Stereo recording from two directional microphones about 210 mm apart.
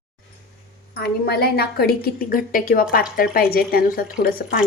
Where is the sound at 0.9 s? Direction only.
50° left (ahead or behind).